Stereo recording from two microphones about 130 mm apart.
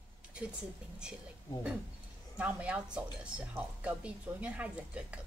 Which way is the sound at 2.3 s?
10° right (ahead or behind).